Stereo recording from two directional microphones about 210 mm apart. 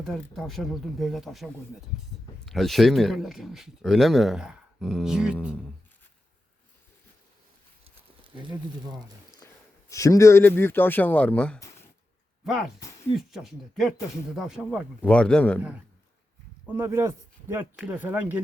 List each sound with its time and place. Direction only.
0.0 s speech: centre (ahead or behind)
2.5 s speech: centre (ahead or behind)
8.2 s a sound: 25° right (ahead or behind)
9.9 s speech: 15° left (ahead or behind)
13.1 s speech: centre (ahead or behind)
16.7 s speech: 10° right (ahead or behind)